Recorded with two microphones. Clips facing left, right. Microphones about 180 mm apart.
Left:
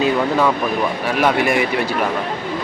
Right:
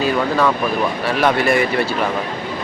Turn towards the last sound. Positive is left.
turn(degrees=15)  # may be behind; listen again after turning